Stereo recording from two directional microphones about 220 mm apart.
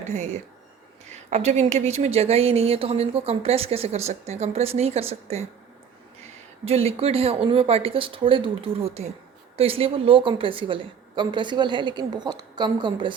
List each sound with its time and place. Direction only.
0.1 s speech: 30° right (ahead or behind)
6.7 s speech: 25° right (ahead or behind)